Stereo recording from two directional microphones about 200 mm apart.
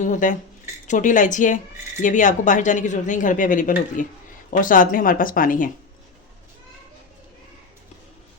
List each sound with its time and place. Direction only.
0.0 s speech: 40° left (ahead or behind)